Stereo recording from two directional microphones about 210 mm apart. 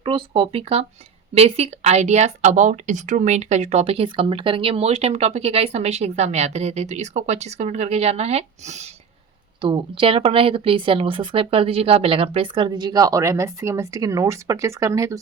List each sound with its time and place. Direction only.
0.0 s a woman's voice: 25° right (ahead or behind)